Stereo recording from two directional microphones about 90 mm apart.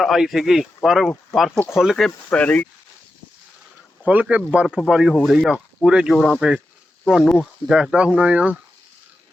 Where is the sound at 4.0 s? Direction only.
15° right (ahead or behind); by 6.4 s 5° left (ahead or behind).